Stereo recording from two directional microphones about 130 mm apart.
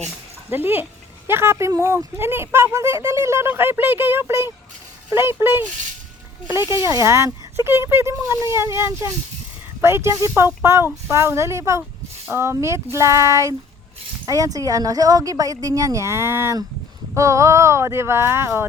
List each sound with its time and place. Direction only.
0.5 s speech: 15° right (ahead or behind)